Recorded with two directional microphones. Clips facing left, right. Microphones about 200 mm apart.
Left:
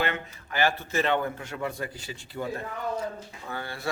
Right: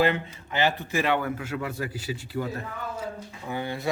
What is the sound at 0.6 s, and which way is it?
Speech, 10° right (ahead or behind).